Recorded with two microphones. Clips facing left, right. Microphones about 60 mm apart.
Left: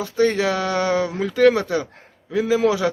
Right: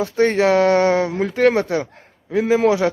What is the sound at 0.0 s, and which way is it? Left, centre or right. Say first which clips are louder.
Speech: right 3 dB; right.